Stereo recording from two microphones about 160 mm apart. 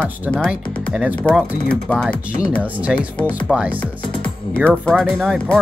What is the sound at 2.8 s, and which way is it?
Speech, 10° right (ahead or behind).